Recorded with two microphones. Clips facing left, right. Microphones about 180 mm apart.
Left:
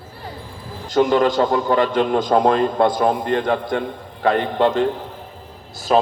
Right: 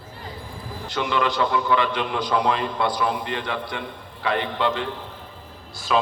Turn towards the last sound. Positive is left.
turn(degrees=40)  # may be behind; listen again after turning